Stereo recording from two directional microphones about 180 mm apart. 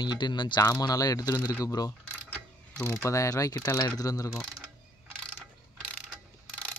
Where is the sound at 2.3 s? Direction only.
10° left (ahead or behind).